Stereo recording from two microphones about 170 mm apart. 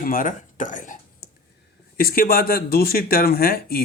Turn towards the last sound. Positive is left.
turn(degrees=60)  # may be behind; listen again after turning